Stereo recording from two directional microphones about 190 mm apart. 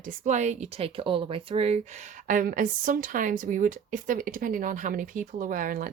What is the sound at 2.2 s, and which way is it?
Speech, 45° right (ahead or behind).